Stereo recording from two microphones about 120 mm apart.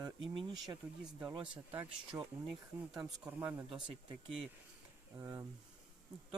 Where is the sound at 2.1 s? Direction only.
5° right (ahead or behind).